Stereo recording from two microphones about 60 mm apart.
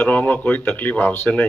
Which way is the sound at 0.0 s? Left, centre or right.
Left.